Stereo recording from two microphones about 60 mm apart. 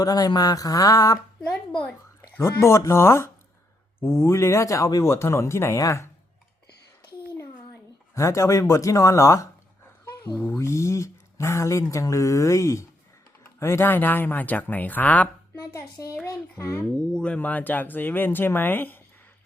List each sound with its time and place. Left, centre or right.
0.0 s speech: left
2.4 s speech: left
8.1 s speech: left
10.3 s speech: left
10.6 s speech: left
13.6 s speech: left
15.5 s speech: left
17.1 s speech: centre; by 18.9 s left